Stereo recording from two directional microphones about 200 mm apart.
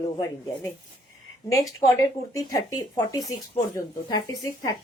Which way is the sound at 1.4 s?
15° left (ahead or behind).